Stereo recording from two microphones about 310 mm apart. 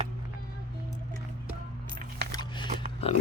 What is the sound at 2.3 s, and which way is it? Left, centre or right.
Biting, centre.